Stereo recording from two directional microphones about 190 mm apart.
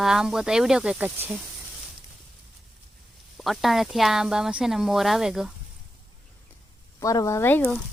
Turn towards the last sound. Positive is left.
turn(degrees=5)  # may be behind; listen again after turning